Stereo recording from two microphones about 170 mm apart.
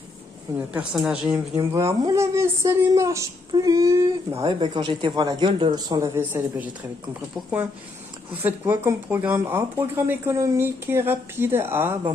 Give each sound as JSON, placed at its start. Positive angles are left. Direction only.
{"t": 0.7, "sound": "speech", "side_deg": -5}
{"t": 1.5, "sound": "speech", "side_deg": -20}
{"t": 8.4, "sound": "speech", "side_deg": -15}